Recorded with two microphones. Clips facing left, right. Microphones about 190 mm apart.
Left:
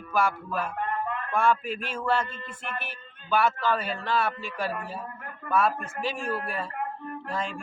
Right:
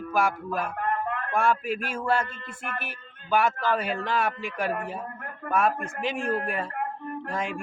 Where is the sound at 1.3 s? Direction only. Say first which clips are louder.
Even; 10° right (ahead or behind).